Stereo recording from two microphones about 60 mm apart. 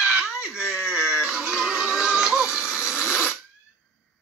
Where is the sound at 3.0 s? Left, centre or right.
Centre.